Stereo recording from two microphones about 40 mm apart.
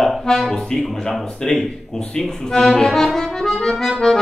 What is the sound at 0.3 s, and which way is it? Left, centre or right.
Accordion, centre.